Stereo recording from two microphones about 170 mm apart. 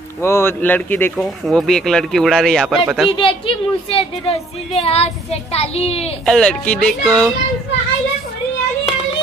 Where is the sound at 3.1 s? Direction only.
30° left (ahead or behind).